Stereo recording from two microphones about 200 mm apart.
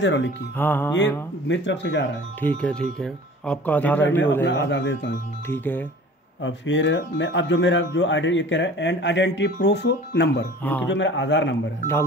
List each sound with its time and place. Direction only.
0.0 s speech: 60° left (ahead or behind)
0.6 s speech: 10° left (ahead or behind)
1.5 s speech: 65° left (ahead or behind)
2.4 s speech: 5° left (ahead or behind)
4.5 s speech: 65° left (ahead or behind)
5.5 s speech: 10° left (ahead or behind)
6.4 s speech: 65° left (ahead or behind)
10.6 s speech: 10° left (ahead or behind)
10.9 s speech: 65° left (ahead or behind)